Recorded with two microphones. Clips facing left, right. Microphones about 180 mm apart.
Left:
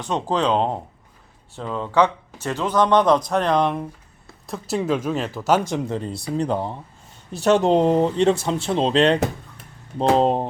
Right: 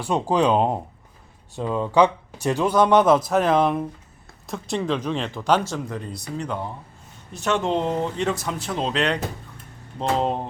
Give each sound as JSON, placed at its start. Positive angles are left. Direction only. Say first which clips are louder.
{"t": 0.0, "sound": "speech", "louder": "right 2 dB", "side_deg": -10}
{"t": 5.9, "sound": "speech", "louder": "left 5 dB", "side_deg": 30}